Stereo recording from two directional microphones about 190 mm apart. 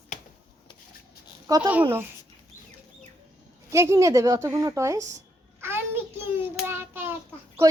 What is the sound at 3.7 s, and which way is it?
A woman's voice, 15° right (ahead or behind).